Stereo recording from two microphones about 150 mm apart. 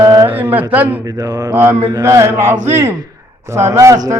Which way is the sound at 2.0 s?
20° right (ahead or behind).